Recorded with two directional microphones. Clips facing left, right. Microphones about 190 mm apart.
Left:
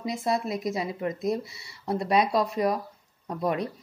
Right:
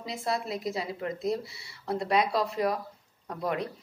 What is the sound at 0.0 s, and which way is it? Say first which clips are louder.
Speech: left 4 dB; 20° left (ahead or behind).